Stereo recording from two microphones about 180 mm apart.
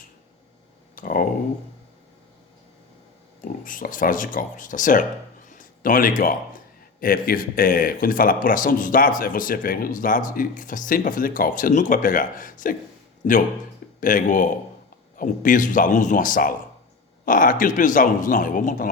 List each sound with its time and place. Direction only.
0.9 s speech: 50° left (ahead or behind)
3.4 s speech: 50° left (ahead or behind)
5.5 s a sound: 50° left (ahead or behind)
7.0 s speech: 55° left (ahead or behind)
14.0 s speech: 50° left (ahead or behind)